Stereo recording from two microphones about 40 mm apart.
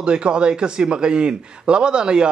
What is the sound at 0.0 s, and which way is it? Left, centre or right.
A man's voice, right.